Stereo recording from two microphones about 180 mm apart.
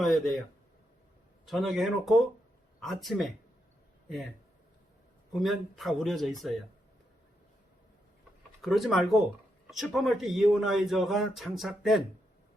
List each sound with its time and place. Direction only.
0.0 s speech: centre (ahead or behind)
1.5 s speech: centre (ahead or behind)
5.3 s speech: centre (ahead or behind)
8.6 s speech: centre (ahead or behind)